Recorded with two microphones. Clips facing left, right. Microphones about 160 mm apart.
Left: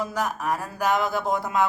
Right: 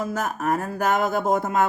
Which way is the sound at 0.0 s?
50° right (ahead or behind).